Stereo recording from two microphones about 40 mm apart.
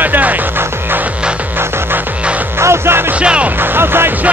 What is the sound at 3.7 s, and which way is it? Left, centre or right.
Music, right.